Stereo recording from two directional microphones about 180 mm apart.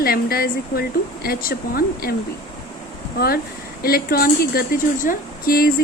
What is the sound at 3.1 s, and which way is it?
Speech, 55° left (ahead or behind).